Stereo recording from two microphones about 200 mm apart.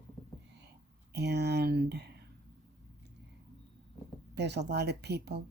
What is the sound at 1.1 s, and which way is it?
Speech, 55° right (ahead or behind).